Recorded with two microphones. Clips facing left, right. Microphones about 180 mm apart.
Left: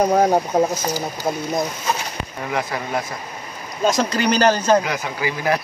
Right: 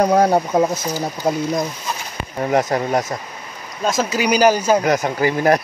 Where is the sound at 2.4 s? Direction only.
40° right (ahead or behind).